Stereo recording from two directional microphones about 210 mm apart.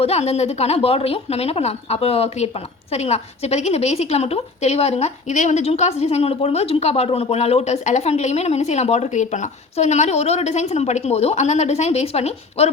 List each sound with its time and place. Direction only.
0.0 s a woman's voice: 30° left (ahead or behind)